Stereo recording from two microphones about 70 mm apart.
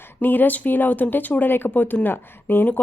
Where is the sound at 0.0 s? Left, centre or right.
Left.